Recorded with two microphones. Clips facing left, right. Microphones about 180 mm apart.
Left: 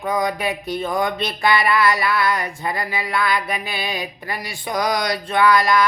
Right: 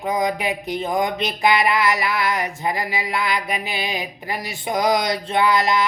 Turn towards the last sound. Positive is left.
turn(degrees=-20)  # may be behind; listen again after turning